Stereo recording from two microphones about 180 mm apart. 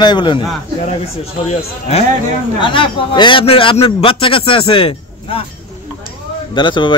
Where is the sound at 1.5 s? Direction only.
35° left (ahead or behind).